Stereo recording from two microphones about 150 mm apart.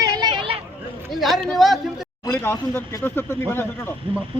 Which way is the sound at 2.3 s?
15° left (ahead or behind).